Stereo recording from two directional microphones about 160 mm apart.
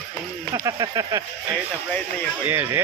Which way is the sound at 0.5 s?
20° right (ahead or behind).